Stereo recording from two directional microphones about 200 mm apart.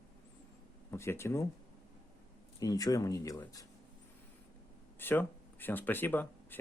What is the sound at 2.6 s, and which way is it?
Speech, 20° left (ahead or behind).